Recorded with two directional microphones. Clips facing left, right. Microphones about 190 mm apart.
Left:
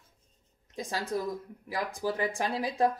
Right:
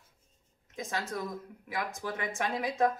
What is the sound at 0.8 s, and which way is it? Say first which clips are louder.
Speech: left 3 dB; 35° left (ahead or behind).